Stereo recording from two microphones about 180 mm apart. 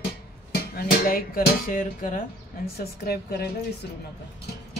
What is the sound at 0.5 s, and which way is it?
Speech, 55° left (ahead or behind).